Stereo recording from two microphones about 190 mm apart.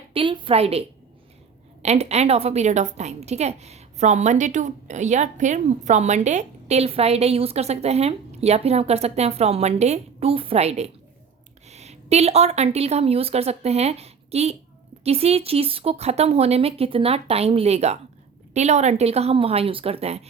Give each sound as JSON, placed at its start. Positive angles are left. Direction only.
{"t": 0.1, "sound": "a woman's voice", "side_deg": -25}